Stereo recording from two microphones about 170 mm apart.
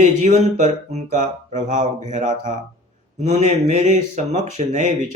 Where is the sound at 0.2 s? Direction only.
45° right (ahead or behind).